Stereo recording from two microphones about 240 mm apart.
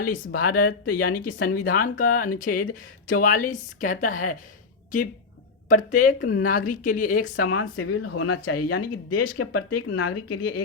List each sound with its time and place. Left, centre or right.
0.3 s speech: left
0.9 s speech: left
5.6 s speech: left
7.5 s speech: left
8.8 s speech: left
9.4 s speech: left